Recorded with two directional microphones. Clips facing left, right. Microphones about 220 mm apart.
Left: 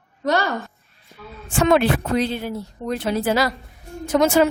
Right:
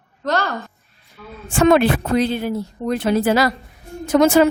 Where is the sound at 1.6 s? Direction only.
55° right (ahead or behind).